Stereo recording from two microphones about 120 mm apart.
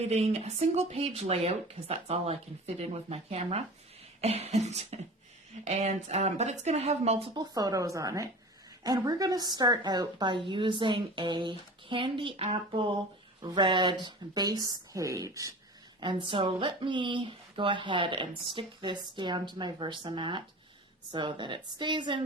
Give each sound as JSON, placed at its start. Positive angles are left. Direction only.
{"t": 0.1, "sound": "speech", "side_deg": -65}
{"t": 7.3, "sound": "a woman's voice", "side_deg": -30}
{"t": 16.0, "sound": "speech", "side_deg": -40}